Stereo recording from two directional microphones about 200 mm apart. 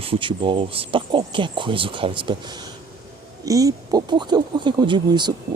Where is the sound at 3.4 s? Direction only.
15° right (ahead or behind).